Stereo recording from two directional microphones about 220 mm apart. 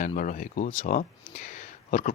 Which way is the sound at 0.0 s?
35° left (ahead or behind).